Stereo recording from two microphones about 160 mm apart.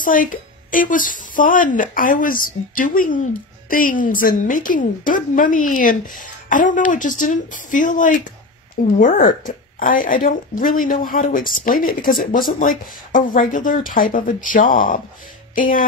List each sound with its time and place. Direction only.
0.0 s a woman's voice: 55° left (ahead or behind)